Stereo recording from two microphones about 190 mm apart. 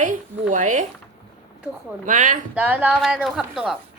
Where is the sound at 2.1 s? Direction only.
45° right (ahead or behind).